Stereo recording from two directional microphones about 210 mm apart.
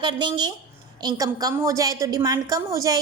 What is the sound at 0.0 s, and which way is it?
A woman's voice, 20° right (ahead or behind).